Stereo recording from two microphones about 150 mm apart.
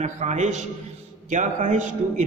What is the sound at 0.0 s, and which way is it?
A man's voice, 50° right (ahead or behind).